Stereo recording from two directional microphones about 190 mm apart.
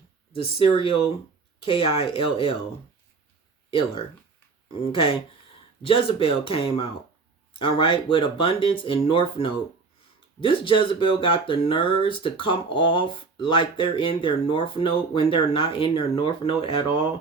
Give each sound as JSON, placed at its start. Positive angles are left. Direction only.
{"t": 0.3, "sound": "speech", "side_deg": 25}
{"t": 3.7, "sound": "speech", "side_deg": 30}